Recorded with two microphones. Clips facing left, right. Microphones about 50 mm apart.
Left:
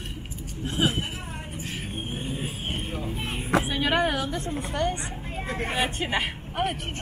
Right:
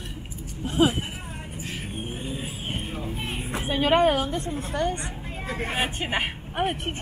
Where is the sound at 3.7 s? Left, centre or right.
Right.